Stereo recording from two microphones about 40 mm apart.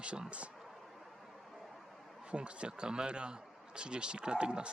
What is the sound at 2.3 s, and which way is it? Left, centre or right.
A man's voice, right.